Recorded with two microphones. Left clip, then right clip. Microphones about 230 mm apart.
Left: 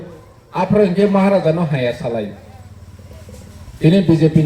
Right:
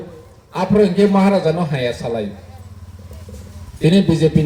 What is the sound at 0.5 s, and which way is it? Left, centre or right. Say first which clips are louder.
A man's voice: even; right.